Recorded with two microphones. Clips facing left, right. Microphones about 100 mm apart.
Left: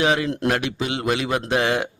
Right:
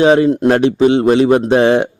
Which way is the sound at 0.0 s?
35° right (ahead or behind).